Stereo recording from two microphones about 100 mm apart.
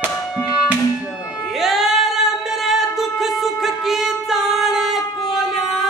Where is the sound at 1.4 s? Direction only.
Centre (ahead or behind).